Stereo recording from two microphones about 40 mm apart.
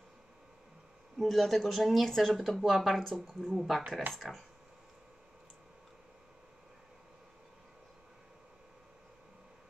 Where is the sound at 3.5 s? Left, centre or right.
Centre.